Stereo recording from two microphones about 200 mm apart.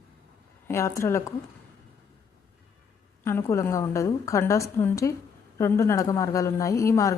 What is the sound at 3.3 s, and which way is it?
A woman's voice, 15° left (ahead or behind).